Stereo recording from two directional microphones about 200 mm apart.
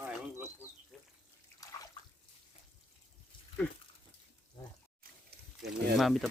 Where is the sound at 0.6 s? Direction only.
10° right (ahead or behind).